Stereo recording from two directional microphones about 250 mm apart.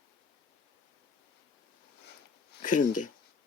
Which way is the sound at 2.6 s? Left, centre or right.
Left.